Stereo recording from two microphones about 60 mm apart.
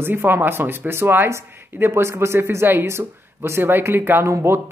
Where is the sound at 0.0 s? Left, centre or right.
Right.